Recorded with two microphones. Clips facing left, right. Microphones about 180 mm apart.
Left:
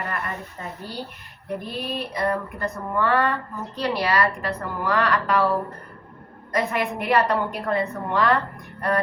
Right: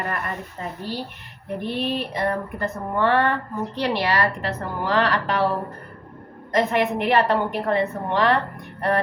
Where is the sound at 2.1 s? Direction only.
25° right (ahead or behind).